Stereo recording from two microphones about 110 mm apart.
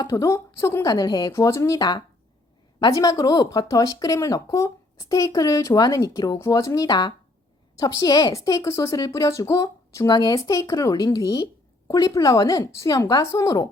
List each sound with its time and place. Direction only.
0.1 s speech: 30° left (ahead or behind)
1.3 s speech: 25° left (ahead or behind)